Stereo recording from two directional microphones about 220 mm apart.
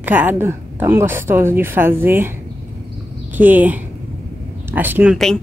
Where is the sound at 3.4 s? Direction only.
10° right (ahead or behind).